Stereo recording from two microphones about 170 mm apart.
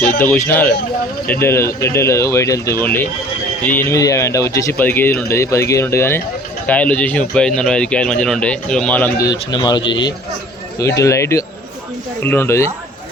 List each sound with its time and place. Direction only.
0.2 s speech: 10° left (ahead or behind)
9.2 s speech: 25° left (ahead or behind)